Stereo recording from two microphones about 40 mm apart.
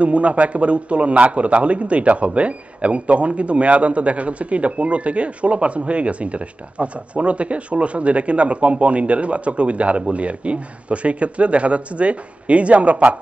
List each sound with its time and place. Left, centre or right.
0.0 s a man's voice: right